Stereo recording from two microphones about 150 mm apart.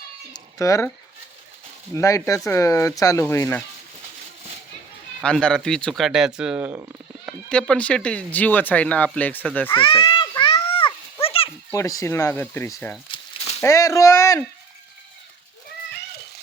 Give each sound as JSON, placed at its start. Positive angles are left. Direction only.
{"t": 0.3, "sound": "speech", "side_deg": 20}
{"t": 2.0, "sound": "speech", "side_deg": 20}
{"t": 5.2, "sound": "speech", "side_deg": 5}
{"t": 7.5, "sound": "speech", "side_deg": 5}
{"t": 9.7, "sound": "children playing", "side_deg": 35}
{"t": 11.7, "sound": "speech", "side_deg": 20}
{"t": 13.1, "sound": "a sound", "side_deg": 30}
{"t": 13.6, "sound": "speech", "side_deg": 20}